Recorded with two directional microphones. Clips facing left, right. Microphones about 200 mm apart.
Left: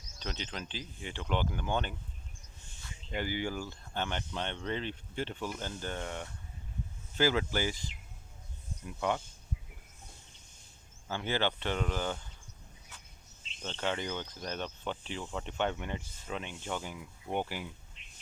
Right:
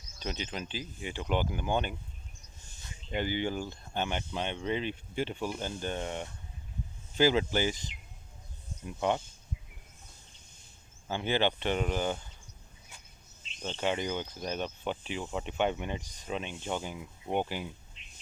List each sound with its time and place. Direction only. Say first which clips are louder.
0.2 s speech: right 3 dB; 10° right (ahead or behind)
11.1 s speech: right 3 dB; 20° right (ahead or behind)
12.9 s cricket: right 1 dB; 15° right (ahead or behind)
13.6 s speech: right 3 dB; 10° right (ahead or behind)
18.0 s a sound: right 2 dB; 50° left (ahead or behind)